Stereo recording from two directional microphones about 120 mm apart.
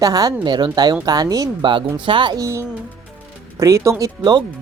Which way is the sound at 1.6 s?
45° right (ahead or behind).